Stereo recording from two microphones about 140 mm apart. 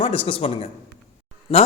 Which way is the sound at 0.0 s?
40° left (ahead or behind).